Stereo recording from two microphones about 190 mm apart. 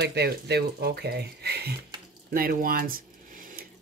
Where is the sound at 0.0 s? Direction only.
60° right (ahead or behind).